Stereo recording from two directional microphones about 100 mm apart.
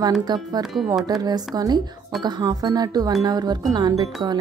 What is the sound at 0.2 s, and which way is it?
Speech, 45° right (ahead or behind).